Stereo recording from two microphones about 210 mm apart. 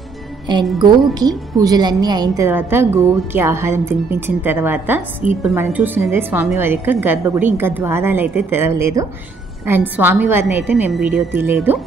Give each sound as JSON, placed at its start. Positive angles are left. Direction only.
{"t": 0.5, "sound": "music", "side_deg": -20}
{"t": 1.1, "sound": "a woman's voice", "side_deg": -20}